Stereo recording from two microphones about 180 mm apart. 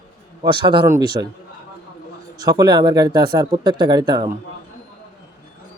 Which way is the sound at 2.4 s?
20° right (ahead or behind).